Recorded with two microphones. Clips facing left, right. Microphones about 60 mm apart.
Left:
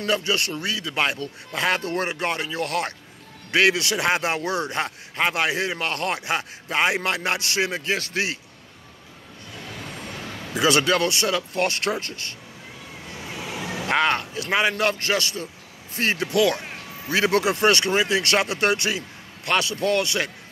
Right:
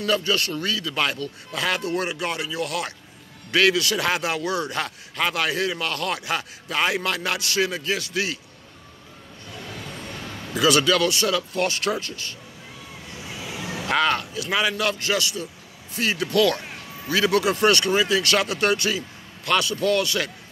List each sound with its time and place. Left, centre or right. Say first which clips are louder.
0.0 s speech: right 1 dB; left
3.5 s a man's voice: even; left
10.5 s speech: right 1 dB; left
13.3 s vehicle: left 1 dB; left
14.7 s speech: left 1 dB; left
16.3 s a man's voice: right 1 dB; left
17.1 s a man's voice: even; left